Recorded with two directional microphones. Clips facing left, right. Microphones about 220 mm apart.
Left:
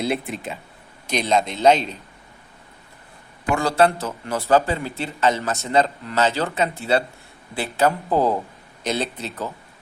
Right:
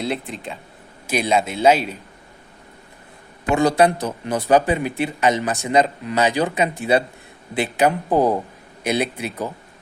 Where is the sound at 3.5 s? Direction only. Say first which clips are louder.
Right 3 dB; 15° right (ahead or behind).